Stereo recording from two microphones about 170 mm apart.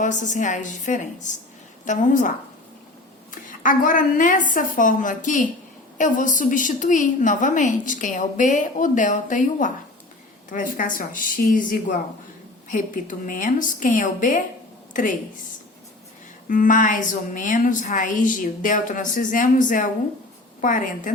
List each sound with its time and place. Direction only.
0.0 s a woman's voice: 45° left (ahead or behind)
3.3 s a woman's voice: 50° left (ahead or behind)
16.5 s a woman's voice: 50° left (ahead or behind)